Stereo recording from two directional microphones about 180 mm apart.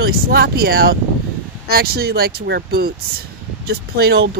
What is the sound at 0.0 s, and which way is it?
Speech, 60° right (ahead or behind).